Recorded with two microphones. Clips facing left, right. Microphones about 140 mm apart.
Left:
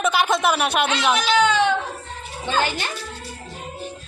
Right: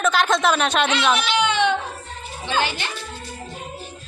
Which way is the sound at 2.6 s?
45° left (ahead or behind).